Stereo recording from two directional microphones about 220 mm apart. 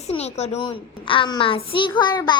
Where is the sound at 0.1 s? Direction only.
30° left (ahead or behind).